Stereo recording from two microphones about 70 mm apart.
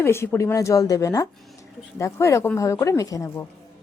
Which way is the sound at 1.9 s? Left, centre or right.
Left.